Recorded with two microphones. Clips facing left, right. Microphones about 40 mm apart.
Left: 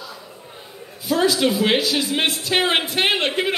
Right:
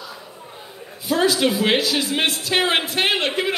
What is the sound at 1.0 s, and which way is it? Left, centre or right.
Speech, centre.